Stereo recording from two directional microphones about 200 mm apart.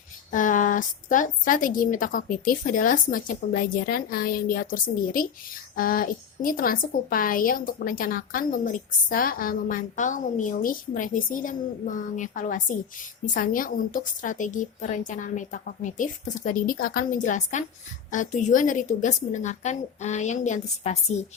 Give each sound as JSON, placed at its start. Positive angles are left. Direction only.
{"t": 0.3, "sound": "a woman's voice", "side_deg": 40}